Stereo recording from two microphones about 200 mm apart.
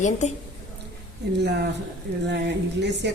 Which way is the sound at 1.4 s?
60° right (ahead or behind).